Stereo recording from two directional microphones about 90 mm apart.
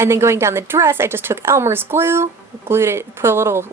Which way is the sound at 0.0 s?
30° right (ahead or behind).